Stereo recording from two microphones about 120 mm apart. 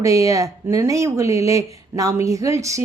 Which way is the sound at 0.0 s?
25° right (ahead or behind).